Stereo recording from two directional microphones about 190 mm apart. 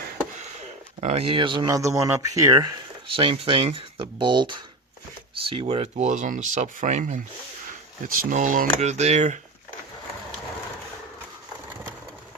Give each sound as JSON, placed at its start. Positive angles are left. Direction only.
{"t": 1.0, "sound": "speech", "side_deg": -30}
{"t": 3.2, "sound": "speech", "side_deg": -30}